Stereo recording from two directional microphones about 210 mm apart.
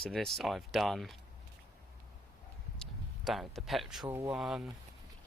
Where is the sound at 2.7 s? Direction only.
Centre (ahead or behind).